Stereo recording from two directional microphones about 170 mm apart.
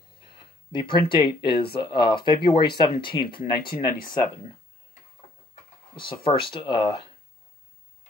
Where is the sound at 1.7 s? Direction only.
30° left (ahead or behind).